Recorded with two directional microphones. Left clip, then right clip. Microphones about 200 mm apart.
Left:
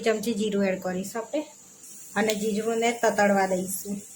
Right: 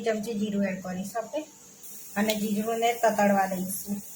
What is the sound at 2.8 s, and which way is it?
Speech, 35° left (ahead or behind).